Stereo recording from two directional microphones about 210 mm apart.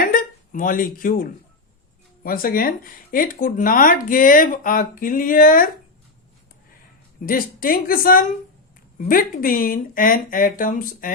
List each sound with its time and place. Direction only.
0.0 s a sound: 40° left (ahead or behind)
2.2 s speech: 45° left (ahead or behind)
7.3 s a woman's voice: 40° left (ahead or behind)